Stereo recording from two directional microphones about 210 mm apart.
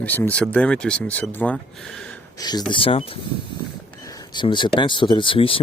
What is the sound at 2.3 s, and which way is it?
Speech, 20° left (ahead or behind).